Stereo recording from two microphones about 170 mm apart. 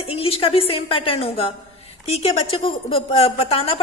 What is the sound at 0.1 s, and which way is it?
A woman's voice, 35° left (ahead or behind).